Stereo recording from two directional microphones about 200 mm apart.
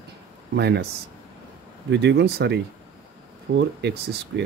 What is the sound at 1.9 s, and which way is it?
Speech, 60° right (ahead or behind).